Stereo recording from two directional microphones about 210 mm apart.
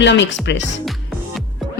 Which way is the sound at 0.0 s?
60° left (ahead or behind).